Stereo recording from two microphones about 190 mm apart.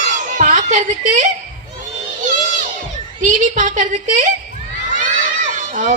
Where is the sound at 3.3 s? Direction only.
40° right (ahead or behind).